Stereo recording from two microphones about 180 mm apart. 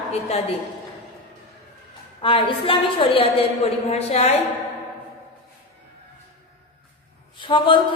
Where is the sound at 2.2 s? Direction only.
30° left (ahead or behind).